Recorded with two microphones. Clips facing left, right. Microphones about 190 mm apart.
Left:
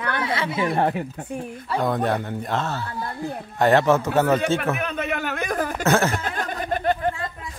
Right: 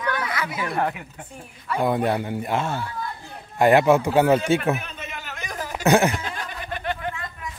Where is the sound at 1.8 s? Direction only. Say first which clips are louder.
Right 2 dB; 10° right (ahead or behind).